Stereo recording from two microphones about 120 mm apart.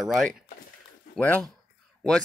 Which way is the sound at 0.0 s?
5° left (ahead or behind).